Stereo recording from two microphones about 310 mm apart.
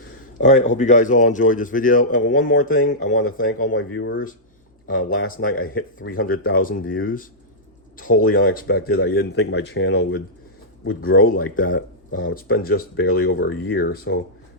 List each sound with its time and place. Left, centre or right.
0.3 s speech: left
2.8 s speech: left
11.3 s speech: left